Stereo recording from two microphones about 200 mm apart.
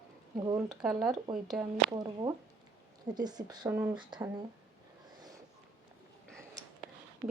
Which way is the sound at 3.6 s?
10° right (ahead or behind).